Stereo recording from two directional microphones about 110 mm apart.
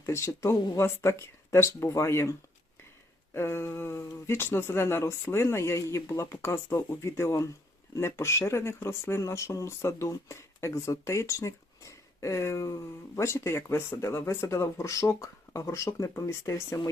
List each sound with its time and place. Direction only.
0.0 s speech: 25° left (ahead or behind)
3.3 s speech: 25° left (ahead or behind)